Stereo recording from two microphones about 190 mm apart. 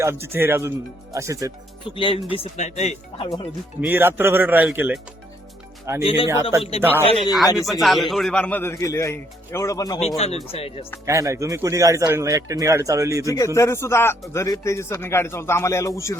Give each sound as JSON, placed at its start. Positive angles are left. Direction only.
{"t": 0.0, "sound": "speech", "side_deg": -15}
{"t": 2.0, "sound": "speech", "side_deg": 30}
{"t": 3.8, "sound": "speech", "side_deg": -10}
{"t": 6.0, "sound": "speech", "side_deg": 30}
{"t": 6.2, "sound": "speech", "side_deg": -15}
{"t": 6.6, "sound": "speech", "side_deg": 35}
{"t": 7.3, "sound": "speech", "side_deg": 0}
{"t": 10.2, "sound": "speech", "side_deg": 30}
{"t": 11.0, "sound": "speech", "side_deg": -15}
{"t": 13.2, "sound": "speech", "side_deg": 15}